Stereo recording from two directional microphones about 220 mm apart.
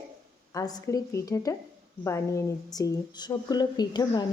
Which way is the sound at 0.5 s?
15° left (ahead or behind).